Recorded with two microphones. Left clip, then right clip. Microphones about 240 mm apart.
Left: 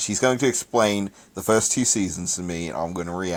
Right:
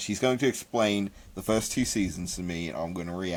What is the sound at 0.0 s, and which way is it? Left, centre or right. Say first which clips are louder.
Speech: left 5 dB; centre.